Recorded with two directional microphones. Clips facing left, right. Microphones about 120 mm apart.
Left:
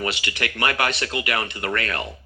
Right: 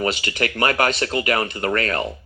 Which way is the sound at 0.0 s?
40° right (ahead or behind).